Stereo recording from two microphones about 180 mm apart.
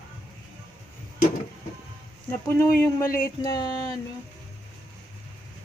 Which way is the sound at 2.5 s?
15° left (ahead or behind).